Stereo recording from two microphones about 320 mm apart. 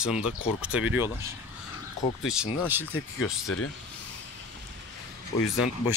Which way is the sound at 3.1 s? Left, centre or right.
Left.